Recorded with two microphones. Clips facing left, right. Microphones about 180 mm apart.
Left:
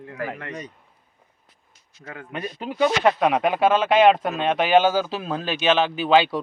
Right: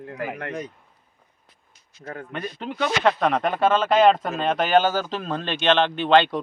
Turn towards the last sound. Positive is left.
turn(degrees=5)  # may be behind; listen again after turning